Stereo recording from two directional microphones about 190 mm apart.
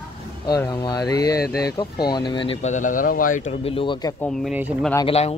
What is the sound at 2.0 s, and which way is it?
Speech, 25° left (ahead or behind).